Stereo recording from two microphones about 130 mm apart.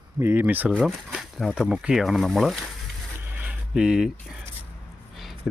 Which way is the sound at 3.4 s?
5° right (ahead or behind).